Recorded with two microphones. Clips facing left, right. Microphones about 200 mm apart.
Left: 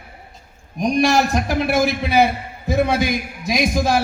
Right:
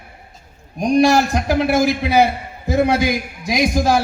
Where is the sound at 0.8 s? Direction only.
55° right (ahead or behind).